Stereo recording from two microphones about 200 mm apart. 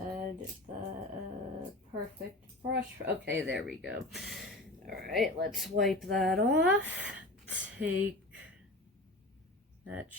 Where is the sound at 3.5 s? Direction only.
5° right (ahead or behind).